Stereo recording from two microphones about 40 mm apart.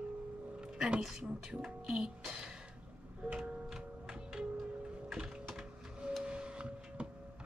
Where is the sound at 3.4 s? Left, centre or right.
Centre.